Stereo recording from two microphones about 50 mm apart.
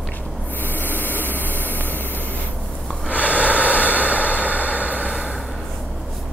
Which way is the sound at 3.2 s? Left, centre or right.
Right.